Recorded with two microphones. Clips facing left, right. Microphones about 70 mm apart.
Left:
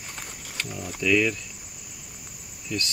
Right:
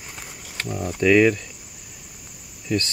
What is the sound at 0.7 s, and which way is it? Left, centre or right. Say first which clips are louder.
Speech: right 6 dB; right.